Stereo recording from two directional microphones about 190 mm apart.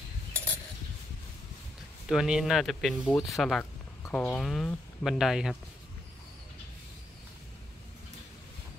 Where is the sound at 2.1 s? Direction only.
5° right (ahead or behind).